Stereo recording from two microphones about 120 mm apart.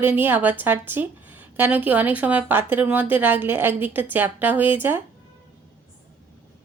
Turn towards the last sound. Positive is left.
turn(degrees=-15)  # may be behind; listen again after turning